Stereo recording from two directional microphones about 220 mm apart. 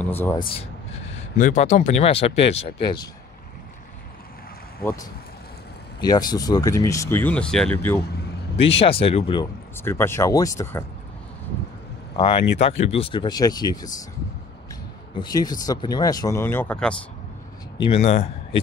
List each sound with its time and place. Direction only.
0.0 s speech: 10° left (ahead or behind)
1.3 s speech: 35° left (ahead or behind)
5.9 s speech: 20° left (ahead or behind)
9.0 s speech: 25° left (ahead or behind)
9.8 s speech: 10° left (ahead or behind)
12.2 s speech: 20° left (ahead or behind)
15.1 s speech: 20° left (ahead or behind)
17.8 s speech: 25° left (ahead or behind)